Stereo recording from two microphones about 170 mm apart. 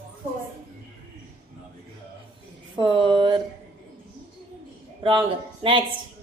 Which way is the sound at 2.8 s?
30° right (ahead or behind).